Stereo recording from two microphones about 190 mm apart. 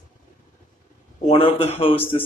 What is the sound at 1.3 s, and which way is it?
Speech, 30° left (ahead or behind).